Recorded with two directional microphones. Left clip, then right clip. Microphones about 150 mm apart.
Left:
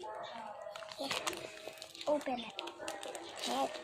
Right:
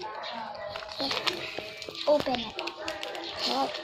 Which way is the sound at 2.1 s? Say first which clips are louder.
Right 10 dB; 35° right (ahead or behind).